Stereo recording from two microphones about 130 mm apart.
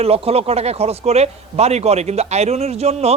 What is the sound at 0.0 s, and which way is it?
Speech, 50° right (ahead or behind).